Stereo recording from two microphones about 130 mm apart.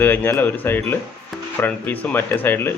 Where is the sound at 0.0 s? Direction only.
15° left (ahead or behind).